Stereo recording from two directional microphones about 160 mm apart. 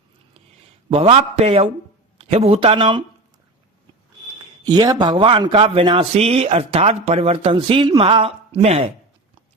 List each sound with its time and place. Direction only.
0.9 s a man's voice: 40° right (ahead or behind)
4.7 s a man's voice: 25° right (ahead or behind); by 8.9 s 40° right (ahead or behind)